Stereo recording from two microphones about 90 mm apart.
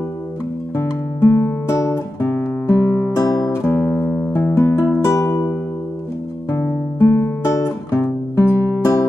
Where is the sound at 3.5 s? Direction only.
25° left (ahead or behind).